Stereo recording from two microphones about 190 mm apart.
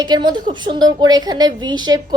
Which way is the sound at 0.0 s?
20° right (ahead or behind).